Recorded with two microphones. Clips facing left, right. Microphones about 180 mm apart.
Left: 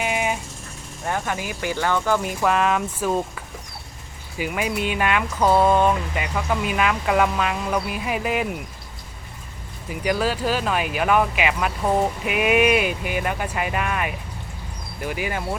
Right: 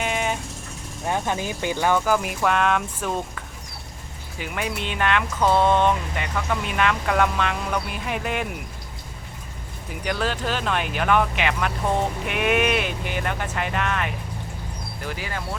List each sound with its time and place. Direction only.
0.0 s vehicle: 5° left (ahead or behind)
1.0 s speech: 20° right (ahead or behind); by 3.1 s 5° left (ahead or behind)
4.4 s speech: 5° left (ahead or behind)
10.0 s speech: 5° left (ahead or behind)